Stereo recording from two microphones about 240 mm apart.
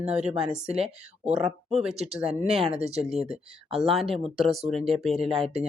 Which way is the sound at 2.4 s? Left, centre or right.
Right.